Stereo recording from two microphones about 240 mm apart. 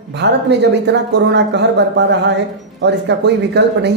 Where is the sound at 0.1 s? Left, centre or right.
Right.